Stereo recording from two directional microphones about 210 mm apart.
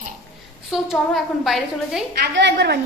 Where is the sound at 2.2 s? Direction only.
55° right (ahead or behind).